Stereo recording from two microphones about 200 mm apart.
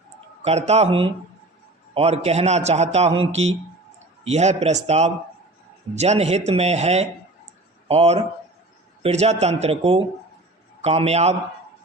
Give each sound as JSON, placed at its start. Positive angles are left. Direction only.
{"t": 0.4, "sound": "a man's voice", "side_deg": -35}